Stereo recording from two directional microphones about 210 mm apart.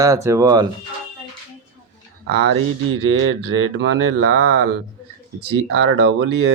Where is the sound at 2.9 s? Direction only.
70° right (ahead or behind); by 4.7 s 55° right (ahead or behind).